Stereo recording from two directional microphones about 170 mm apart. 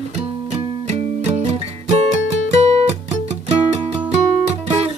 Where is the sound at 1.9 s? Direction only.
40° right (ahead or behind).